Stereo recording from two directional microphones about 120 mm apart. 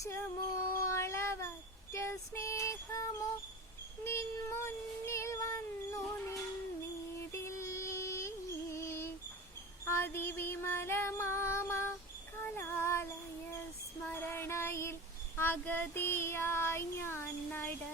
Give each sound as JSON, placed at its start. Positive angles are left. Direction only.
{"t": 0.0, "sound": "a sound", "side_deg": 25}
{"t": 0.9, "sound": "cat", "side_deg": 25}
{"t": 1.9, "sound": "child singing", "side_deg": 25}
{"t": 7.4, "sound": "a sound", "side_deg": 25}
{"t": 9.8, "sound": "music", "side_deg": 20}
{"t": 12.4, "sound": "child singing", "side_deg": 20}
{"t": 14.1, "sound": "music", "side_deg": 20}
{"t": 15.4, "sound": "child singing", "side_deg": 15}